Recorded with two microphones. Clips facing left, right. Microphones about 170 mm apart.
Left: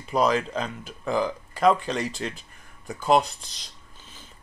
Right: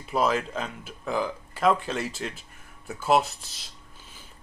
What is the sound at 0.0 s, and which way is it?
A man's voice, 5° right (ahead or behind).